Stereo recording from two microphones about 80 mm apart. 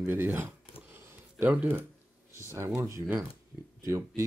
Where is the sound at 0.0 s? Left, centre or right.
Right.